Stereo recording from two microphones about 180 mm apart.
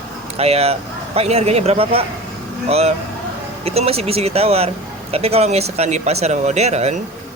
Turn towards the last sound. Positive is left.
turn(degrees=-35)  # may be behind; listen again after turning